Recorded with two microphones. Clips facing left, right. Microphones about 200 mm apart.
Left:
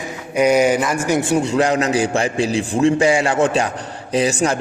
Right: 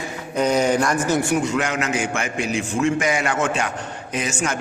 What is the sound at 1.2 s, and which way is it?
A man's voice, 25° left (ahead or behind).